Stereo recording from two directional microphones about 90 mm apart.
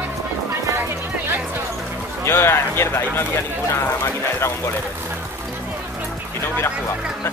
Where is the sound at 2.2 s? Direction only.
30° left (ahead or behind).